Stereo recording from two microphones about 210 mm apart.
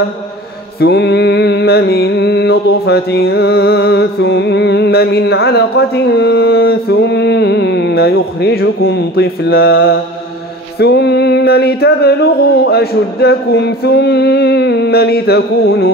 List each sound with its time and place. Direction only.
0.7 s music: 50° left (ahead or behind)